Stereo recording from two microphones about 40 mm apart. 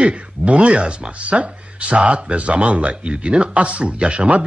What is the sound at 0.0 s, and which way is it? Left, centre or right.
Speech, right.